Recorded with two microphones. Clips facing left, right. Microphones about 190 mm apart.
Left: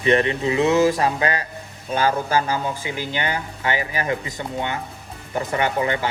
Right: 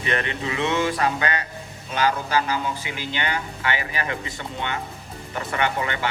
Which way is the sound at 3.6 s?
30° left (ahead or behind).